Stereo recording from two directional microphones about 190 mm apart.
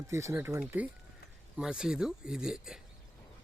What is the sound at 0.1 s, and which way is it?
Speech, 15° right (ahead or behind).